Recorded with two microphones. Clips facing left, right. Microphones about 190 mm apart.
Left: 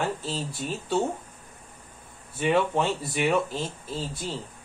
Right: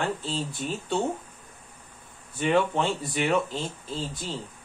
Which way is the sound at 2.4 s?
10° left (ahead or behind).